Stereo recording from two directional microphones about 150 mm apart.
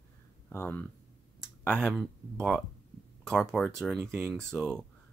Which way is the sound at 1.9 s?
Centre (ahead or behind).